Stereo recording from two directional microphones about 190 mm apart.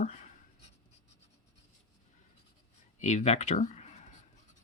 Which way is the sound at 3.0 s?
40° left (ahead or behind).